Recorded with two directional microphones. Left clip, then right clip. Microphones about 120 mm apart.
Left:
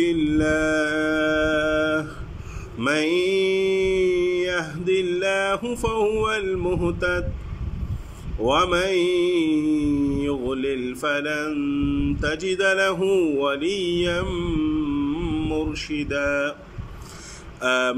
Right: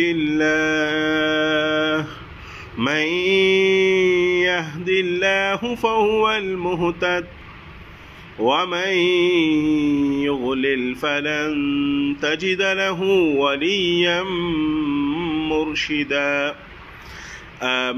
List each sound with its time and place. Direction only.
0.0 s mantra: centre (ahead or behind)
8.5 s mantra: centre (ahead or behind)
17.6 s mantra: centre (ahead or behind)